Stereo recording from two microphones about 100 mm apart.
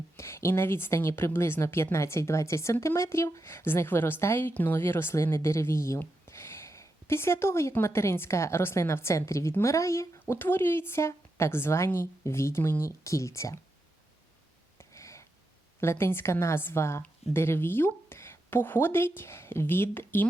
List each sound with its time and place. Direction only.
0.2 s a woman's voice: 25° left (ahead or behind)
14.8 s a sound: 30° left (ahead or behind)
15.8 s a woman's voice: 25° left (ahead or behind)